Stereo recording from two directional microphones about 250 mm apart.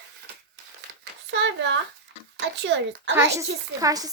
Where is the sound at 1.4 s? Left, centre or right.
Right.